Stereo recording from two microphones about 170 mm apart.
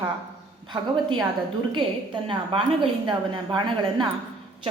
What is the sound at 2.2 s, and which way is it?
A woman's voice, 30° right (ahead or behind).